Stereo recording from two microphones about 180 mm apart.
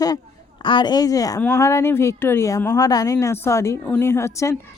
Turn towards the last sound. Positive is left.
turn(degrees=15)  # may be behind; listen again after turning